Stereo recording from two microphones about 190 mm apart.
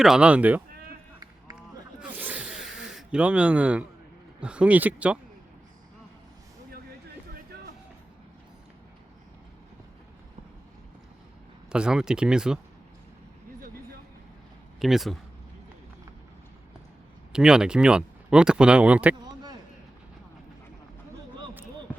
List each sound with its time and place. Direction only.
0.0 s speech: 5° right (ahead or behind)
1.2 s run: 20° right (ahead or behind)
2.0 s a sound: 5° right (ahead or behind)
4.4 s speech: 5° right (ahead or behind)
11.7 s speech: 5° right (ahead or behind)
14.8 s speech: centre (ahead or behind)
17.3 s speech: 5° right (ahead or behind)